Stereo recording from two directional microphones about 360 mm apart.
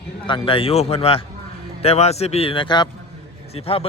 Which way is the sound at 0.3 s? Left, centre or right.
Centre.